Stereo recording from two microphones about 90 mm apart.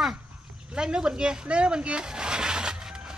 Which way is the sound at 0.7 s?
10° right (ahead or behind).